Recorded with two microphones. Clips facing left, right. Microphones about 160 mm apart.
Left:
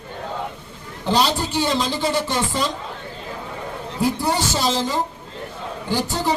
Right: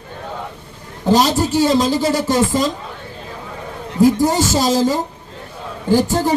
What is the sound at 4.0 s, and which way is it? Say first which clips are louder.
Music: right 8 dB; 40° right (ahead or behind).